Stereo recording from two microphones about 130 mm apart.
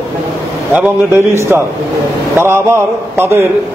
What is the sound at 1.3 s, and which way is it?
A man's voice, 20° right (ahead or behind).